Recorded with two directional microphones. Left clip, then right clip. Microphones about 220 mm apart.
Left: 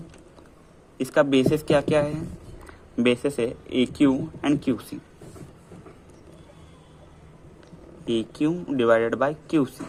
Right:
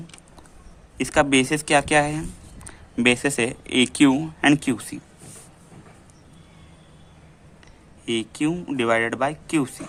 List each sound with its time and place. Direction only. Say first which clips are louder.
0.9 s speech: right 1 dB; 25° right (ahead or behind)
8.0 s speech: even; 10° right (ahead or behind)